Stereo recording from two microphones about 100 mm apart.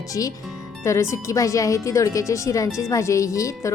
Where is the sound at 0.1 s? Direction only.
35° left (ahead or behind).